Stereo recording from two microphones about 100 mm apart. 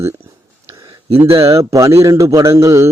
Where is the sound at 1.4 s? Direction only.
30° right (ahead or behind).